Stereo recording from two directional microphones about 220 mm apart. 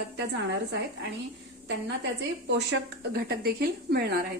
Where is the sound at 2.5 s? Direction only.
55° right (ahead or behind).